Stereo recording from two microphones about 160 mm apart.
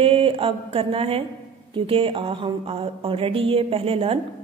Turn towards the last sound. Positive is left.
turn(degrees=-40)  # may be behind; listen again after turning